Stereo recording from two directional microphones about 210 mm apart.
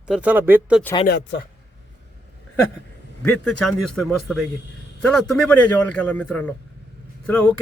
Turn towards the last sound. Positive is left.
turn(degrees=5)  # may be behind; listen again after turning